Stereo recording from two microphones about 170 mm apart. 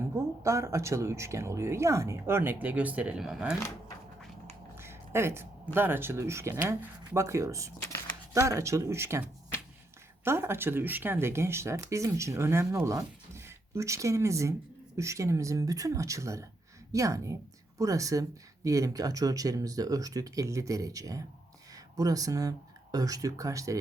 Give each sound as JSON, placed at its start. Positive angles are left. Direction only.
{"t": 0.1, "sound": "speech", "side_deg": -15}
{"t": 4.7, "sound": "speech", "side_deg": -15}